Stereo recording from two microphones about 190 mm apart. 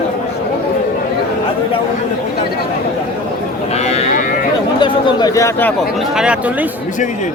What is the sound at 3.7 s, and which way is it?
Livestock, 35° left (ahead or behind).